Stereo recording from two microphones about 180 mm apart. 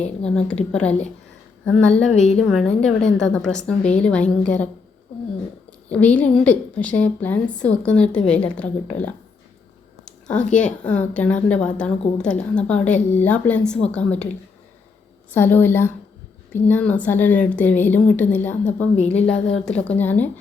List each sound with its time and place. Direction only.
0.2 s a woman's voice: 5° left (ahead or behind)
5.9 s a woman's voice: 5° left (ahead or behind)
10.1 s a sound: 5° left (ahead or behind)
10.6 s a woman's voice: 5° left (ahead or behind)
15.3 s a woman's voice: 10° left (ahead or behind)